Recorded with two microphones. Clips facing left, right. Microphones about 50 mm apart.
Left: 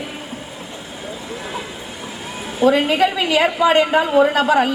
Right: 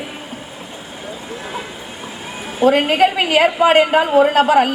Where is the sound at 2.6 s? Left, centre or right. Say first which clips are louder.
Right 2 dB; right.